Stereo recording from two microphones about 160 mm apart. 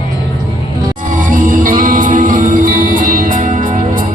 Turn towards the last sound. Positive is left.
turn(degrees=-55)  # may be behind; listen again after turning